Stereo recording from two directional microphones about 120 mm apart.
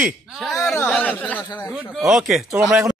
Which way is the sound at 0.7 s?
10° left (ahead or behind).